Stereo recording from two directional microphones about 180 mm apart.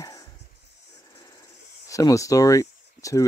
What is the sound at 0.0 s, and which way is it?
Music, 20° left (ahead or behind).